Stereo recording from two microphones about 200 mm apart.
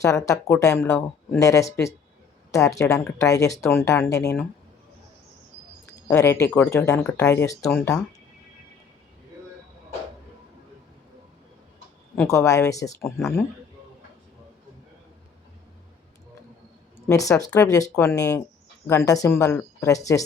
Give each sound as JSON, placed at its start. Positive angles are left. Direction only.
{"t": 0.0, "sound": "speech", "side_deg": 15}
{"t": 6.1, "sound": "speech", "side_deg": 15}
{"t": 12.1, "sound": "speech", "side_deg": 10}
{"t": 17.2, "sound": "speech", "side_deg": 15}